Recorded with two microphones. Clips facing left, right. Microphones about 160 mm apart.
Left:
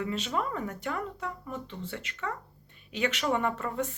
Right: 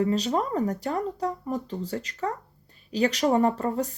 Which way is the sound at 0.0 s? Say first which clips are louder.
Right 7 dB; 35° right (ahead or behind).